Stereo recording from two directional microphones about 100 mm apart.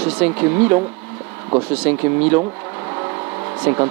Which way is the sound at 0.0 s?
20° right (ahead or behind).